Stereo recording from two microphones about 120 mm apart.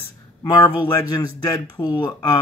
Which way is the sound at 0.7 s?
35° left (ahead or behind).